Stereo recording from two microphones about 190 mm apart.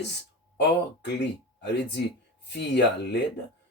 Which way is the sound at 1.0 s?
65° left (ahead or behind).